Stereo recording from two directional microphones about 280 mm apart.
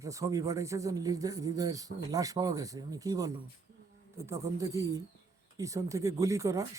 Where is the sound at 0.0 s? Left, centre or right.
Centre.